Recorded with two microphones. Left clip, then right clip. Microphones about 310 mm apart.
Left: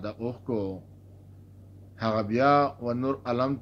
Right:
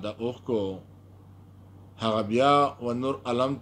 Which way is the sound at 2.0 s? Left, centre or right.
Right.